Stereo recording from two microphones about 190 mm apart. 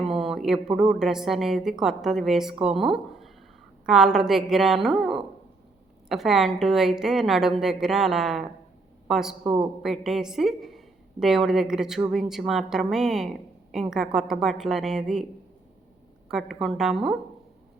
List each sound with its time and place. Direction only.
0.2 s speech: centre (ahead or behind)
9.4 s a man's voice: 25° right (ahead or behind)
9.8 s speech: centre (ahead or behind)
16.3 s speech: centre (ahead or behind)